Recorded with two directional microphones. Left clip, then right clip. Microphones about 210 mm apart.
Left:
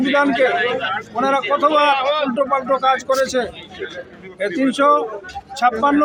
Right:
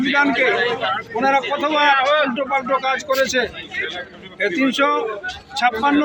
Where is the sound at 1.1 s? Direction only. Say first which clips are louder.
Left 1 dB; 15° left (ahead or behind).